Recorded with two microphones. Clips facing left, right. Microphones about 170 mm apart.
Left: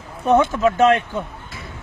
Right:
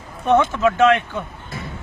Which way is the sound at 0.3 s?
10° left (ahead or behind).